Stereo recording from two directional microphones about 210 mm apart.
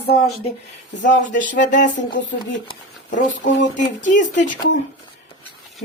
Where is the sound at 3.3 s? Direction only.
60° left (ahead or behind).